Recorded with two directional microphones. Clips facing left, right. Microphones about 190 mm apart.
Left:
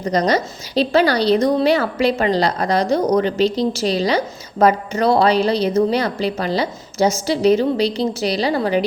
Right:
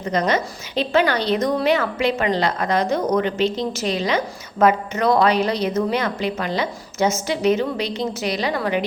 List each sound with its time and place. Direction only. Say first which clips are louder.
0.0 s a woman's voice: left 3 dB; 35° left (ahead or behind)